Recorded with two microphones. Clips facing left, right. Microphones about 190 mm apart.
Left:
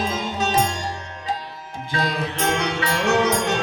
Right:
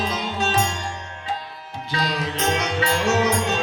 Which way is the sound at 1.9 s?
50° left (ahead or behind).